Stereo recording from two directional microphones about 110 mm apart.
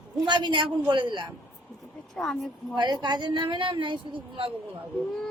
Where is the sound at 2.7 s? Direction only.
40° right (ahead or behind).